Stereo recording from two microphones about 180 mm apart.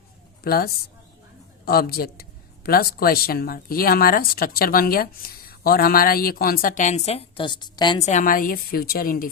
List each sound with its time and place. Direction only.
0.4 s a woman's voice: 55° left (ahead or behind); by 8.0 s 25° left (ahead or behind)
8.0 s a woman's voice: 45° left (ahead or behind)